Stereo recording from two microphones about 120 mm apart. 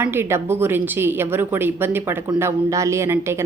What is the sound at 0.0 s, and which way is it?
A woman's voice, 20° right (ahead or behind).